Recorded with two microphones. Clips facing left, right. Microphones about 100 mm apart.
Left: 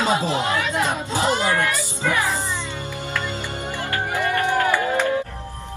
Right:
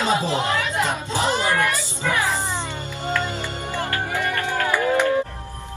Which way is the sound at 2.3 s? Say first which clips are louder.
Right 1 dB; 20° right (ahead or behind).